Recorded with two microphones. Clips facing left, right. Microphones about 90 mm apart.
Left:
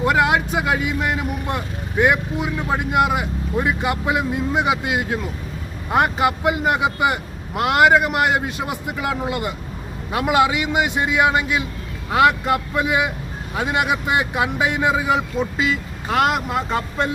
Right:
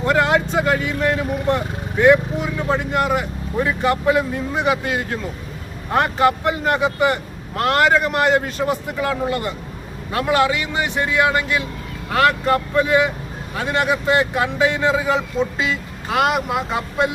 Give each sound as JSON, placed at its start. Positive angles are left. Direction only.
{"t": 0.0, "sound": "vehicle", "side_deg": 10}
{"t": 2.0, "sound": "speech", "side_deg": 15}